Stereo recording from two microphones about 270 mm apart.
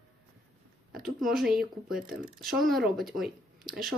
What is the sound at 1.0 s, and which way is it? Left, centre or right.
A woman's voice, centre.